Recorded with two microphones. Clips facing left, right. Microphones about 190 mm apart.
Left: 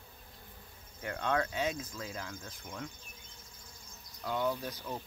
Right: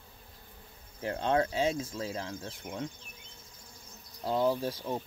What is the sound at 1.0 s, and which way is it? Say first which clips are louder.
Speech: right 5 dB; 30° right (ahead or behind).